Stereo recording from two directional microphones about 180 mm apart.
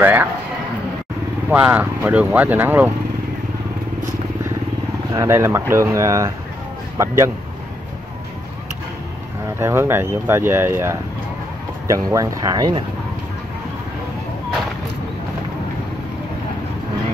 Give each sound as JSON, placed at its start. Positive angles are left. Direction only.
{"t": 0.0, "sound": "speech", "side_deg": -10}
{"t": 1.5, "sound": "speech", "side_deg": -10}
{"t": 5.1, "sound": "speech", "side_deg": -15}
{"t": 9.6, "sound": "speech", "side_deg": -15}